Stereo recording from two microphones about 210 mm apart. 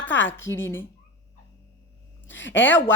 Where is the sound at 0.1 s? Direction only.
60° left (ahead or behind).